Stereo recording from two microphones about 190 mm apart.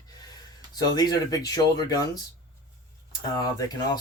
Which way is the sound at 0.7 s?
20° left (ahead or behind).